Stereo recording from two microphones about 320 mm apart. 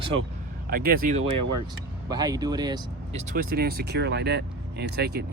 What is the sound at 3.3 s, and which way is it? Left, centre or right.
Speech, right.